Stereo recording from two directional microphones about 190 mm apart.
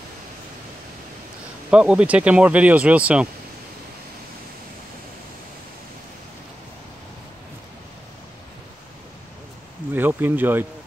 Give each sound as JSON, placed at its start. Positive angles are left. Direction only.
{"t": 1.7, "sound": "speech", "side_deg": -5}
{"t": 9.9, "sound": "speech", "side_deg": -10}